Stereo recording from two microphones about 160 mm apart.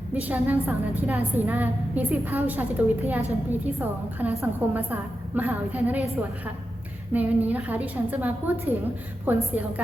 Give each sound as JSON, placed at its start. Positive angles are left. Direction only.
{"t": 0.1, "sound": "a woman's voice", "side_deg": -10}